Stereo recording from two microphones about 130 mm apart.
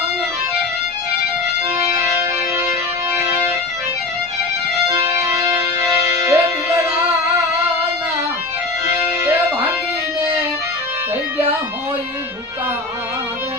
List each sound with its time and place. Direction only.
5.0 s music: 20° right (ahead or behind)
8.9 s music: 20° right (ahead or behind)